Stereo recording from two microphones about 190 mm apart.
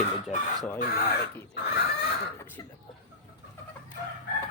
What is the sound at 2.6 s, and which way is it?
Speech, 20° left (ahead or behind).